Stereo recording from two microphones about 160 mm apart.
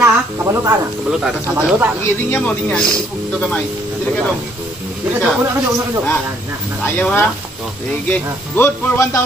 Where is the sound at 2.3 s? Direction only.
5° left (ahead or behind).